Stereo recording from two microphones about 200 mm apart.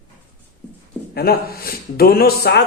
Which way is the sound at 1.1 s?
50° left (ahead or behind).